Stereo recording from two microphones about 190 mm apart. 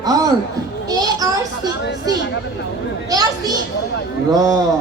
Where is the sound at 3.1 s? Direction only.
20° right (ahead or behind).